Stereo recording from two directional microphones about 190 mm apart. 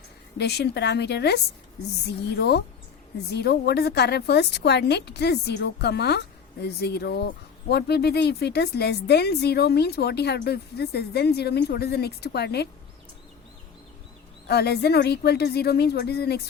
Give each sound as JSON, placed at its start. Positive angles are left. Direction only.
{"t": 0.3, "sound": "a woman's voice", "side_deg": 60}
{"t": 14.4, "sound": "a woman's voice", "side_deg": 60}